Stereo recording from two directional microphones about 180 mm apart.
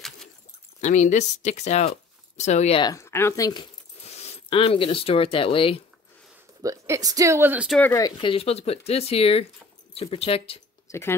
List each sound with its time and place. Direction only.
0.7 s speech: 45° left (ahead or behind)
2.8 s speech: 15° left (ahead or behind)
4.3 s speech: 30° left (ahead or behind)
6.6 s a woman's voice: 20° right (ahead or behind)
7.9 s speech: 25° left (ahead or behind)
10.9 s speech: 15° left (ahead or behind)